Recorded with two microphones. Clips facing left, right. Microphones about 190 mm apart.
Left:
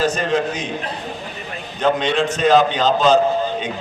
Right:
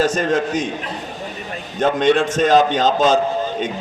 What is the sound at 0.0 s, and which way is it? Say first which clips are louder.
Speech: right 1 dB; 45° right (ahead or behind).